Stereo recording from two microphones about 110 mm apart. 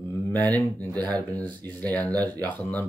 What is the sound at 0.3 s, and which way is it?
Speech, 15° left (ahead or behind).